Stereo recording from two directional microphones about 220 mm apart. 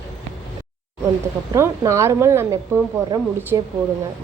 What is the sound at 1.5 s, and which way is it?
A woman's voice, 15° right (ahead or behind).